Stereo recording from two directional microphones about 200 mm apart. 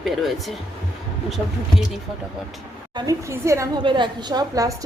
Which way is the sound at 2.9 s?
20° right (ahead or behind).